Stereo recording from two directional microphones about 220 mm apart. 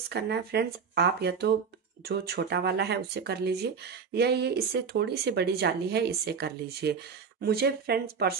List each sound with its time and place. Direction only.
0.1 s speech: 45° right (ahead or behind)